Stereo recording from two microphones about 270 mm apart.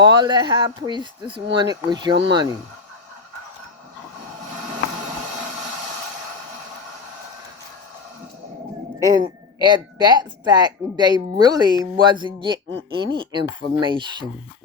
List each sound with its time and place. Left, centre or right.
0.0 s speech: centre
9.0 s speech: centre